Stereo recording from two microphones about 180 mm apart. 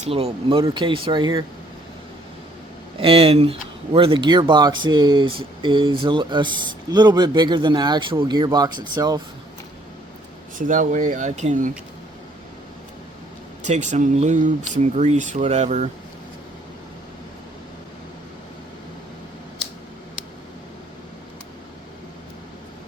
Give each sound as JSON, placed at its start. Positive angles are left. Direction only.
{"t": 0.0, "sound": "speech", "side_deg": -35}
{"t": 3.0, "sound": "speech", "side_deg": -30}
{"t": 10.6, "sound": "speech", "side_deg": -45}
{"t": 13.6, "sound": "speech", "side_deg": -40}